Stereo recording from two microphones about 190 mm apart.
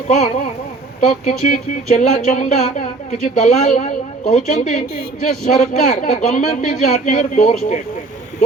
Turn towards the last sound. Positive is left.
turn(degrees=40)  # may be behind; listen again after turning